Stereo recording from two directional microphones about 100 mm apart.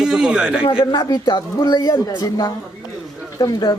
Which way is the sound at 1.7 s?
35° left (ahead or behind).